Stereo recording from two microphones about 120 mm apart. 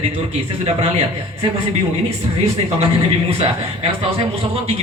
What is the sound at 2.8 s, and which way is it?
Speech, 55° right (ahead or behind).